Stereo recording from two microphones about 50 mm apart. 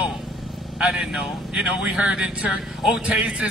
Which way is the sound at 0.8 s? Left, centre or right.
Centre.